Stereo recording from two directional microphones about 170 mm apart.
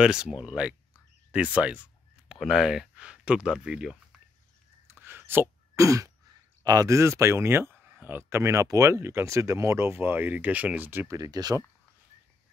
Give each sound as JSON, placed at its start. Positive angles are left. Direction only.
{"t": 0.0, "sound": "speech", "side_deg": -5}
{"t": 4.8, "sound": "sneeze", "side_deg": -15}
{"t": 6.6, "sound": "speech", "side_deg": -20}